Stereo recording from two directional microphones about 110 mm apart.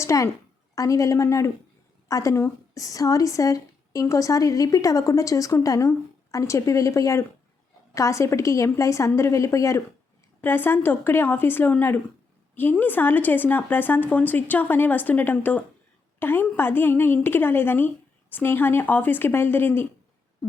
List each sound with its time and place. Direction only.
0.0 s a woman's voice: 25° left (ahead or behind)